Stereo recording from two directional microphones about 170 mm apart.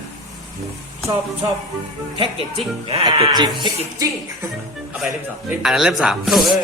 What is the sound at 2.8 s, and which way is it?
Speech, 30° right (ahead or behind).